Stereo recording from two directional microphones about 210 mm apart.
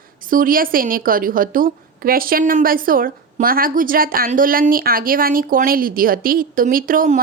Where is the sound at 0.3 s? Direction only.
40° right (ahead or behind).